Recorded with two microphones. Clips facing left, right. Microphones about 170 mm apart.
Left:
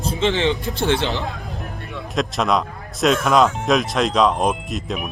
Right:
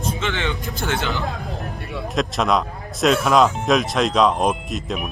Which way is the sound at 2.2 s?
Centre (ahead or behind).